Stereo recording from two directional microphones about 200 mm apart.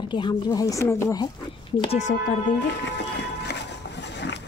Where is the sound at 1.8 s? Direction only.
35° left (ahead or behind).